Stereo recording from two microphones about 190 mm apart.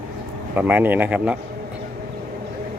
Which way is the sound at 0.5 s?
10° right (ahead or behind).